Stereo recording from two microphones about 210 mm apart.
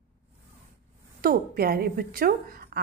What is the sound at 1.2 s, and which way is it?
A woman's voice, 45° right (ahead or behind).